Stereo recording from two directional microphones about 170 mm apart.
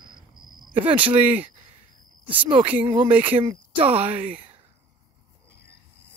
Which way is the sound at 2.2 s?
30° right (ahead or behind).